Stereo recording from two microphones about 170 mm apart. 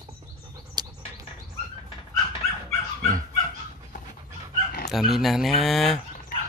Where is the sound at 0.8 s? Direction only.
25° right (ahead or behind).